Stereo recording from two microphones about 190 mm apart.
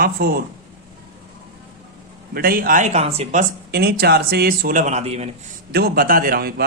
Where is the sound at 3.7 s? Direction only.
55° right (ahead or behind); by 5.2 s 35° right (ahead or behind).